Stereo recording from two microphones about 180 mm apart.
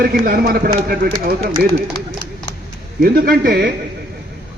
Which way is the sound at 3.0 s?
55° right (ahead or behind).